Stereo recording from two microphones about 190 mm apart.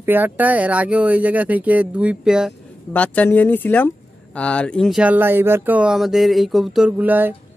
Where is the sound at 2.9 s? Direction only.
10° left (ahead or behind).